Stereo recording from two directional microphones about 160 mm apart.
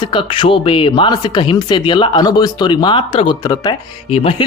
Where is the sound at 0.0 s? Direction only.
30° left (ahead or behind).